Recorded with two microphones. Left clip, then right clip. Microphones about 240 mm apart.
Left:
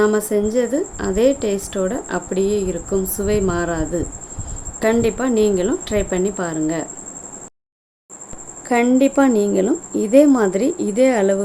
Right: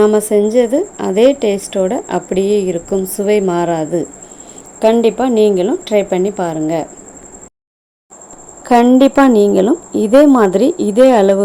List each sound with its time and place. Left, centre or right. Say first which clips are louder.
0.0 s a woman's voice: right 6 dB; centre
8.6 s a woman's voice: right 7 dB; centre